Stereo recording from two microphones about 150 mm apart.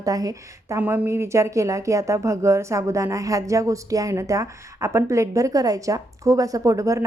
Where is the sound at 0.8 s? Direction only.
10° right (ahead or behind).